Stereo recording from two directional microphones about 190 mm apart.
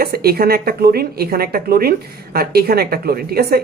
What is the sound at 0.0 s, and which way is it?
Speech, 55° right (ahead or behind).